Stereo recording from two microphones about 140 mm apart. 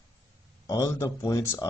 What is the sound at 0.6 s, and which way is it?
Speech, 20° left (ahead or behind).